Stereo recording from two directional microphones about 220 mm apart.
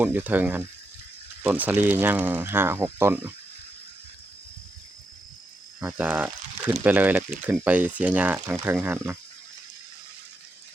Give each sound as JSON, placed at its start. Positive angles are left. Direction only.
{"t": 0.0, "sound": "speech", "side_deg": -10}
{"t": 5.8, "sound": "speech", "side_deg": -5}